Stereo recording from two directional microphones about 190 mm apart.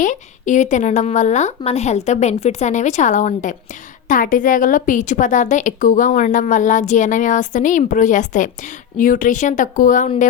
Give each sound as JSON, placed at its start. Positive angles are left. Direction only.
{"t": 0.0, "sound": "a woman's voice", "side_deg": 40}